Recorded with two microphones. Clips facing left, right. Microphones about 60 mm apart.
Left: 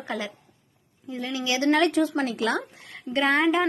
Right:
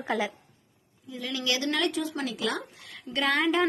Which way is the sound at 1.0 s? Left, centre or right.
Left.